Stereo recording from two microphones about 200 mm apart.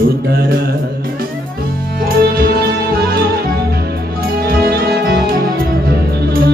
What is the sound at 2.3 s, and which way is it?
Music, 50° right (ahead or behind).